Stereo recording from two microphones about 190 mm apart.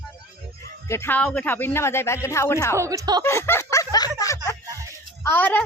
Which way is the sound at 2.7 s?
15° right (ahead or behind).